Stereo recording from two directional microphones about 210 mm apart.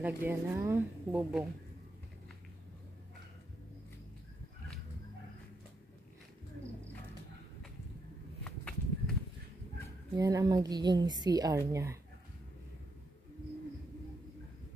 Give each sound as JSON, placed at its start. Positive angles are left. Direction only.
{"t": 0.0, "sound": "speech", "side_deg": -10}
{"t": 8.5, "sound": "walk", "side_deg": 5}
{"t": 10.1, "sound": "speech", "side_deg": -15}